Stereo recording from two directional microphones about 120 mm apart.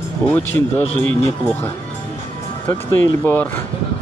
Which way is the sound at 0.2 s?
15° left (ahead or behind).